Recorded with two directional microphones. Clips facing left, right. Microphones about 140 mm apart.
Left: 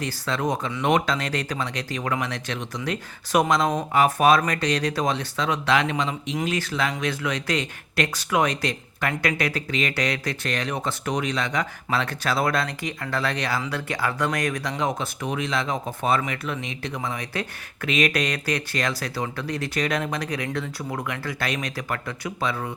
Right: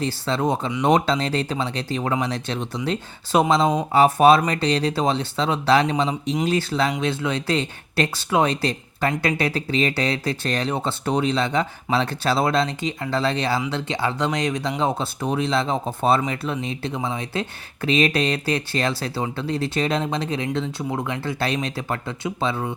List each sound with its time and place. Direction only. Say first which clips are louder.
0.0 s speech: right 4 dB; 30° right (ahead or behind)